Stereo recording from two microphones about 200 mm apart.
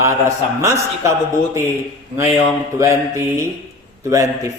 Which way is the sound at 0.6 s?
15° right (ahead or behind).